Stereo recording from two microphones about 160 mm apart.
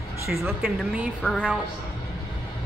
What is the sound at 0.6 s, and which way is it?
Speech, 5° right (ahead or behind).